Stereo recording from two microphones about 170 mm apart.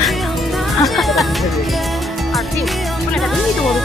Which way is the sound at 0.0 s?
Centre (ahead or behind).